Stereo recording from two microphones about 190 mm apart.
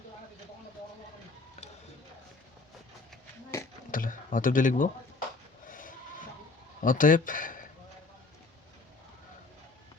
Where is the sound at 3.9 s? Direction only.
45° left (ahead or behind).